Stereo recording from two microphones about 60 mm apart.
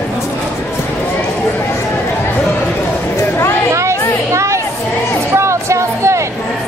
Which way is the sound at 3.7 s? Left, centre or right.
Right.